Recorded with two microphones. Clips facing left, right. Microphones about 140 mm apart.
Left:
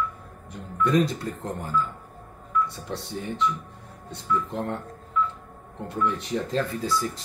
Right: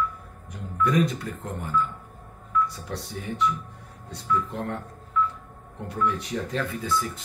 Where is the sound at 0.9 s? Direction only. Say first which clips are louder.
Left 1 dB; 30° left (ahead or behind).